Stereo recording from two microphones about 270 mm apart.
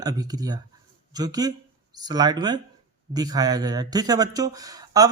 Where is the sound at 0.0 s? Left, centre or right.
Centre.